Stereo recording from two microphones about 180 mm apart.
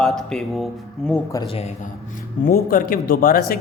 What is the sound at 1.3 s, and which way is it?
Speech, 20° left (ahead or behind).